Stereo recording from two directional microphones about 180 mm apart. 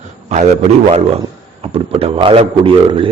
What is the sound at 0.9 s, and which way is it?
A man's voice, 35° right (ahead or behind).